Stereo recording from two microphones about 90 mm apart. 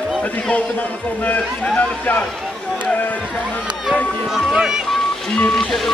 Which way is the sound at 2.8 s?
15° left (ahead or behind).